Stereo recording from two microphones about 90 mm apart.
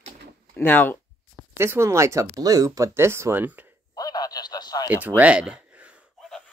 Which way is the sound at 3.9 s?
45° left (ahead or behind).